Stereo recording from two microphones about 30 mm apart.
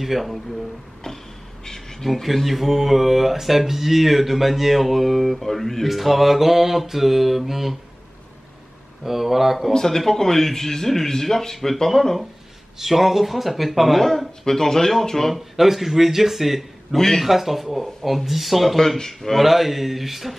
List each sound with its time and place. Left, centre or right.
0.0 s speech: centre
1.0 s a sound: centre
2.2 s speech: centre
5.9 s speech: centre
9.0 s speech: centre
9.7 s speech: centre
12.7 s speech: centre
15.3 s speech: centre
16.9 s speech: centre
17.2 s speech: centre
18.8 s speech: centre
19.4 s speech: centre